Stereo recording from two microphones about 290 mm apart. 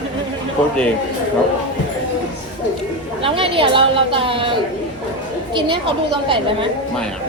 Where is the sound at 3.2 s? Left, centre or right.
Centre.